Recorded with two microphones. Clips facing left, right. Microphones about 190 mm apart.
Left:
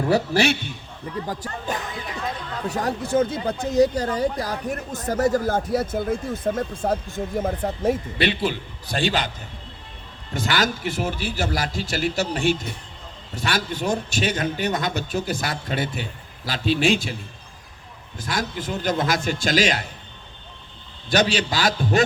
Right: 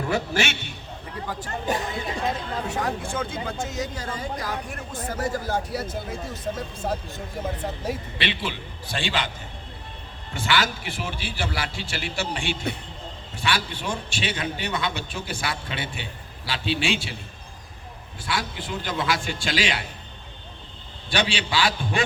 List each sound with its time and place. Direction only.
0.1 s speech: 35° left (ahead or behind)
1.7 s speech: 25° right (ahead or behind)
2.6 s speech: 40° left (ahead or behind)
10.3 s a man's voice: 40° left (ahead or behind)
18.2 s a man's voice: 40° left (ahead or behind)
21.1 s speech: 40° left (ahead or behind)